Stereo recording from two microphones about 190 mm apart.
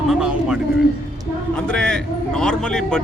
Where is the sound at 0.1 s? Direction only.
5° right (ahead or behind).